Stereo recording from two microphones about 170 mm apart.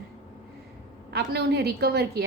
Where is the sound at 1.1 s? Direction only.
70° right (ahead or behind).